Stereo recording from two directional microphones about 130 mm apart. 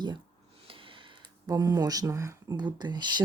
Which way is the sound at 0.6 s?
45° right (ahead or behind).